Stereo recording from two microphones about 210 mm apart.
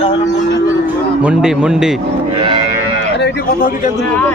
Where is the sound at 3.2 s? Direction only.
55° left (ahead or behind).